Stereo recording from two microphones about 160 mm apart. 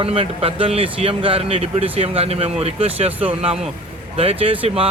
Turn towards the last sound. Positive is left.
turn(degrees=-35)  # may be behind; listen again after turning